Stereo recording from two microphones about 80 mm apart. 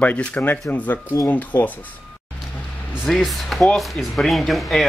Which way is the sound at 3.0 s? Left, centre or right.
Centre.